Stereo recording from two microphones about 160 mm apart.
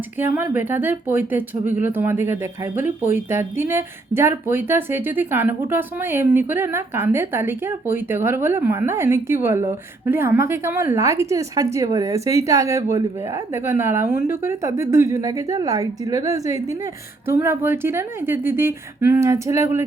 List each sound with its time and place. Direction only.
0.2 s a woman's voice: 15° right (ahead or behind)